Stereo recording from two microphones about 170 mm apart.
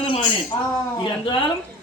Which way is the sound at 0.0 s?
30° left (ahead or behind).